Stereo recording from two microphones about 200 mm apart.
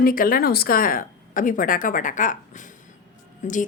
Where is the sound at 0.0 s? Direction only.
45° left (ahead or behind).